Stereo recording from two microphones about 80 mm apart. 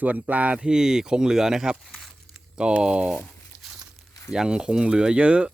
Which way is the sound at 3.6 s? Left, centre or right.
Centre.